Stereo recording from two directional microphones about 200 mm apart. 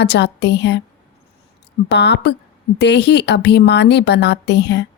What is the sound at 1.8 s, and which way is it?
Speech, 60° left (ahead or behind).